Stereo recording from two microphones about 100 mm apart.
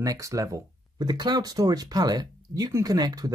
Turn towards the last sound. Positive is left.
turn(degrees=-40)  # may be behind; listen again after turning